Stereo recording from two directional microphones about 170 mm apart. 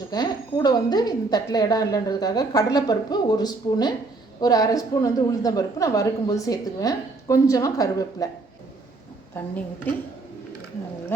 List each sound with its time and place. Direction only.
0.1 s a woman's voice: 25° left (ahead or behind)
9.9 s speech: 10° left (ahead or behind)